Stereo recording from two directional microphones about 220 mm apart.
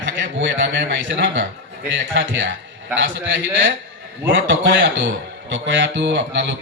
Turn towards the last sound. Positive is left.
turn(degrees=-55)  # may be behind; listen again after turning